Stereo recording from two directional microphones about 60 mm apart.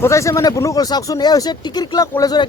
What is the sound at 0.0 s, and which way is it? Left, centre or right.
Speech, left.